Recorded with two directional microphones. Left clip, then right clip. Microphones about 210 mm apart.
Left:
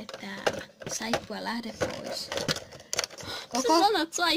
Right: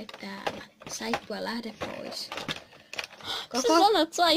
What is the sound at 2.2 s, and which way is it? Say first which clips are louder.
Speech: left 8 dB; 30° left (ahead or behind).